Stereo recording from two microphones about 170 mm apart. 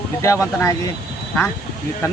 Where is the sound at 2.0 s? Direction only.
20° left (ahead or behind).